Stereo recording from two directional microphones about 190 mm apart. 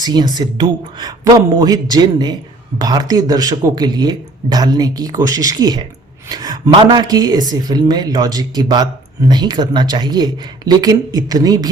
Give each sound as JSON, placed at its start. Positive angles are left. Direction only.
{"t": 0.0, "sound": "speech", "side_deg": -20}